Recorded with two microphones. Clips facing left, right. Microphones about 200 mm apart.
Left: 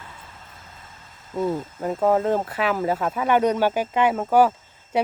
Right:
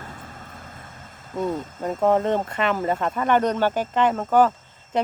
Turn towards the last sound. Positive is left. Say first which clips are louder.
# left 1 dB
turn(degrees=10)  # may be behind; listen again after turning